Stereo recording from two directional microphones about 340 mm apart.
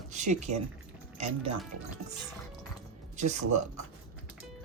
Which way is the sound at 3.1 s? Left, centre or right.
Centre.